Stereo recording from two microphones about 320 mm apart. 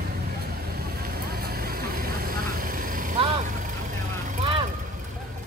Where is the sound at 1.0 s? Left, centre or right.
Right.